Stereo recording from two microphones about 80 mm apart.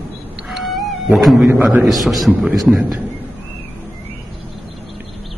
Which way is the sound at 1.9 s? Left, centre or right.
Centre.